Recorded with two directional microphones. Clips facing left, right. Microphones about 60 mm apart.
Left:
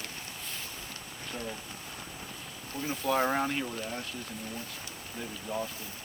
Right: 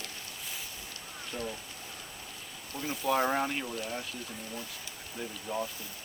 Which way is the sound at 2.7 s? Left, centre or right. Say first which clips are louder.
Left 1 dB; left.